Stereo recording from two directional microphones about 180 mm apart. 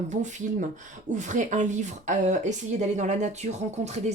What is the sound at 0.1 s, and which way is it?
Speech, 40° right (ahead or behind).